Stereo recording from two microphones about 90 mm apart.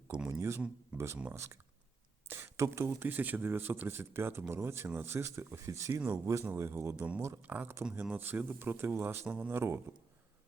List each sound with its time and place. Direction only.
0.3 s a sound: 30° right (ahead or behind)
0.9 s speech: 30° right (ahead or behind)
7.4 s speech: 20° right (ahead or behind)